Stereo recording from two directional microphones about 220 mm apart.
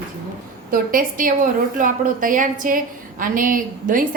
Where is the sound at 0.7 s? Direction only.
40° right (ahead or behind).